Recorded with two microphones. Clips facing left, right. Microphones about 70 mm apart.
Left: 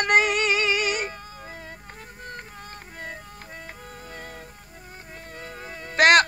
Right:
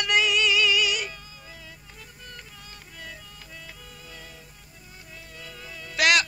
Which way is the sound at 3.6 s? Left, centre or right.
Left.